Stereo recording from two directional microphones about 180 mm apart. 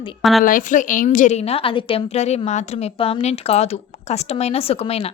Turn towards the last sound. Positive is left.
turn(degrees=35)  # may be behind; listen again after turning